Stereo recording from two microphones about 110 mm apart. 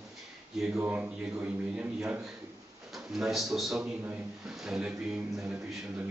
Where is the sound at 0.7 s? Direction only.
15° right (ahead or behind).